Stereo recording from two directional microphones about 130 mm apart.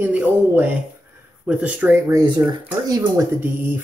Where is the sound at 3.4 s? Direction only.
15° right (ahead or behind).